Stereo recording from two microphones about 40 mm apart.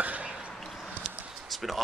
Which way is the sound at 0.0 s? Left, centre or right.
Right.